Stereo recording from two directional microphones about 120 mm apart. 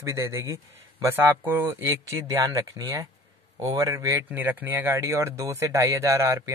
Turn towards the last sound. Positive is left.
turn(degrees=-25)  # may be behind; listen again after turning